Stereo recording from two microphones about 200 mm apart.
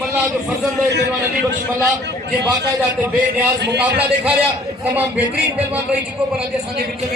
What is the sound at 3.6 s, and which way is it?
Speech, 55° right (ahead or behind).